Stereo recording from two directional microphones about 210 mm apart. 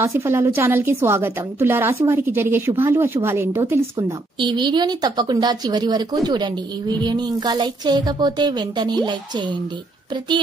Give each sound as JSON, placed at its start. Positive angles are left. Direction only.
{"t": 0.0, "sound": "a woman's voice", "side_deg": -15}